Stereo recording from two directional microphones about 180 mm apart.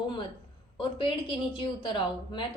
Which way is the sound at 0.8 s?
25° left (ahead or behind).